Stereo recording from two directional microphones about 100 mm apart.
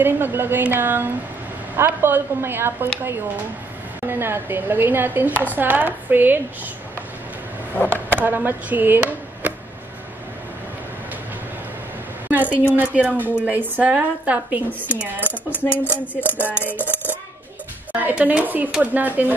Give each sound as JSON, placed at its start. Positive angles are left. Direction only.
{"t": 0.0, "sound": "a woman's voice", "side_deg": -20}
{"t": 7.7, "sound": "speech", "side_deg": 15}
{"t": 8.1, "sound": "chop", "side_deg": -20}
{"t": 12.3, "sound": "a woman's voice", "side_deg": -15}
{"t": 15.8, "sound": "a sound", "side_deg": 20}
{"t": 16.3, "sound": "a woman's voice", "side_deg": -15}
{"t": 17.9, "sound": "a woman's voice", "side_deg": -15}